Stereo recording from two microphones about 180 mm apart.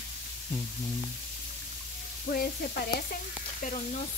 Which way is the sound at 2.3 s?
50° left (ahead or behind).